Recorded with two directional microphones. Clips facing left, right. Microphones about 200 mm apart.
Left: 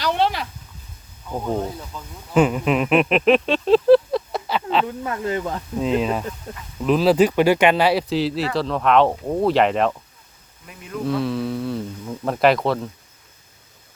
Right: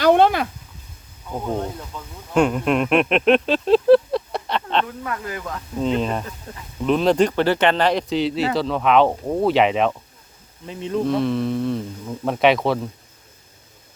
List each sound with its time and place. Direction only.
0.0 s a sound: 50° right (ahead or behind)
1.3 s speech: 5° left (ahead or behind)
4.9 s speech: 25° left (ahead or behind)
5.8 s speech: 5° left (ahead or behind)
10.7 s insect: 25° right (ahead or behind)
11.0 s speech: centre (ahead or behind)